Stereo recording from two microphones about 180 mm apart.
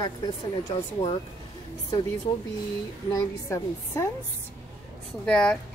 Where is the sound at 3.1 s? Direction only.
15° left (ahead or behind).